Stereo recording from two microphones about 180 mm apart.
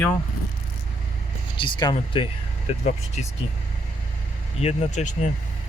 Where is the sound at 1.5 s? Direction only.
25° left (ahead or behind).